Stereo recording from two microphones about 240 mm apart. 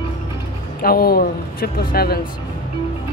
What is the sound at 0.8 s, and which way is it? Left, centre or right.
Speech, left.